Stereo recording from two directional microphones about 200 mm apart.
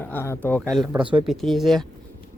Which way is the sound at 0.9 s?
25° right (ahead or behind).